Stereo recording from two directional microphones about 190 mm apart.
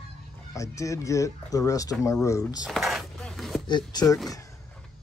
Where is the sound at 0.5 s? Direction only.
15° left (ahead or behind).